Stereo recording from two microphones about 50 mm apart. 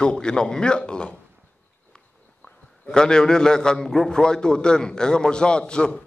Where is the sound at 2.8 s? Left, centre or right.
Centre.